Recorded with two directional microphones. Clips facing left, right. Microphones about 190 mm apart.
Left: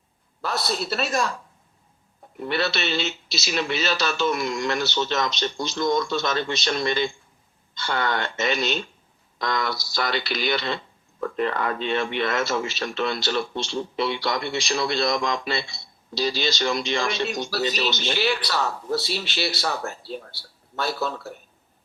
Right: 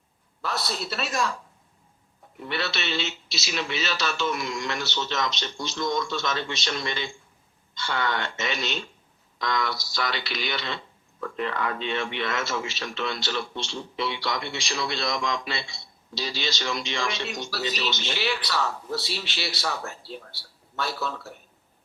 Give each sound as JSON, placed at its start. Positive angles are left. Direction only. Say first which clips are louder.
{"t": 0.4, "sound": "a man's voice", "louder": "left 4 dB", "side_deg": 40}
{"t": 2.4, "sound": "a man's voice", "louder": "left 5 dB", "side_deg": 40}